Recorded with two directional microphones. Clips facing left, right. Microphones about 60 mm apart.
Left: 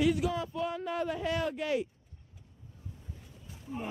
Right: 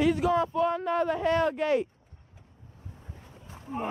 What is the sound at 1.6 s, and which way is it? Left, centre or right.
Speech, right.